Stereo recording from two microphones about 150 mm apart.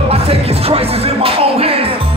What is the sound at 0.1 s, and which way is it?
Music, 40° right (ahead or behind).